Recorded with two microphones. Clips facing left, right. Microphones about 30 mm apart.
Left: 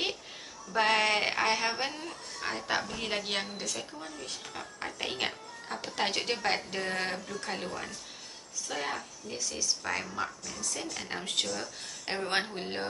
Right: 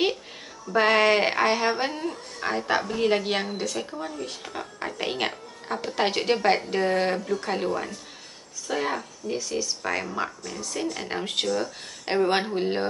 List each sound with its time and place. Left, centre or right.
0.7 s speech: centre